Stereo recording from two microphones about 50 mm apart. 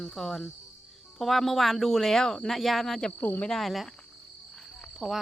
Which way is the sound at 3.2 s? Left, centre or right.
Left.